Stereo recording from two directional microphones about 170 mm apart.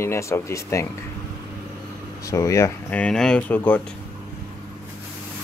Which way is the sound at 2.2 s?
20° left (ahead or behind).